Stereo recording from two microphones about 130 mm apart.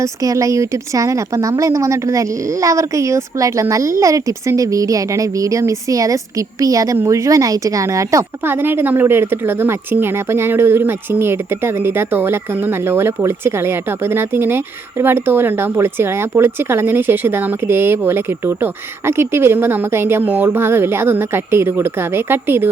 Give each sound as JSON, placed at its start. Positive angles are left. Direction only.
{"t": 0.0, "sound": "a woman's voice", "side_deg": -25}